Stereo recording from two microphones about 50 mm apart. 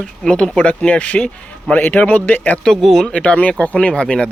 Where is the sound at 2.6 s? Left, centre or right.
Centre.